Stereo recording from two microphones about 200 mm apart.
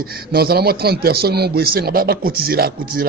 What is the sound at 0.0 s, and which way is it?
A man's voice, 50° right (ahead or behind).